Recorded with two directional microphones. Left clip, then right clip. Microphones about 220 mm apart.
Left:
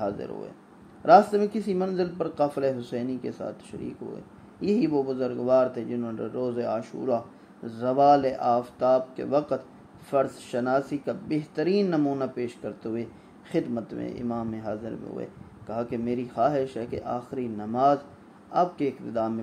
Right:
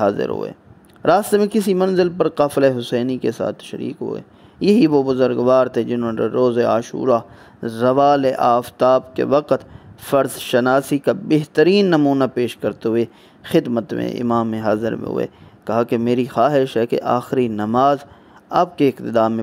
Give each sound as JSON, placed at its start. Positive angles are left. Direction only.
{"t": 0.0, "sound": "speech", "side_deg": -50}